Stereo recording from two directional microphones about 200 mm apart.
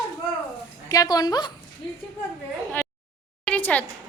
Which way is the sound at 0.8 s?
20° left (ahead or behind).